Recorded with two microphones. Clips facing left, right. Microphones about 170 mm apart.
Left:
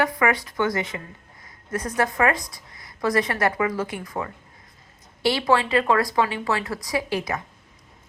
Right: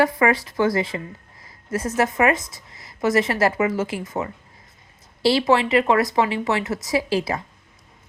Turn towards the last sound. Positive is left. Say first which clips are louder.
# right 4 dB
turn(degrees=-30)  # may be behind; listen again after turning